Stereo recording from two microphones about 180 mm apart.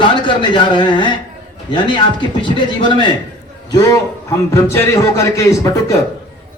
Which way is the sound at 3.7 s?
20° left (ahead or behind).